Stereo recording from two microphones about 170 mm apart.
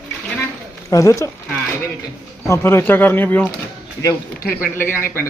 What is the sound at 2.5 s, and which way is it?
Speech, 15° left (ahead or behind).